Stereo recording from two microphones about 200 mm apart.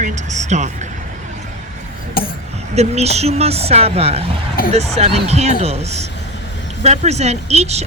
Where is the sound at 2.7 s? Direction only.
30° right (ahead or behind).